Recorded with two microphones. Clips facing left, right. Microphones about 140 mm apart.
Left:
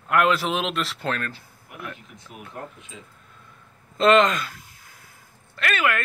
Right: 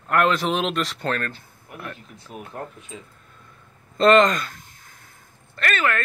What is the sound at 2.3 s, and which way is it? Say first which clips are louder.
Speech: right 5 dB; 35° right (ahead or behind).